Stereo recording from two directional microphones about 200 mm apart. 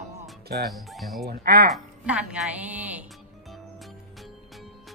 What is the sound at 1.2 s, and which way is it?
Speech, 50° right (ahead or behind).